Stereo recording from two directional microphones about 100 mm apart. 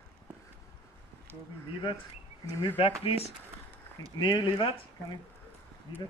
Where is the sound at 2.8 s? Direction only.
70° left (ahead or behind).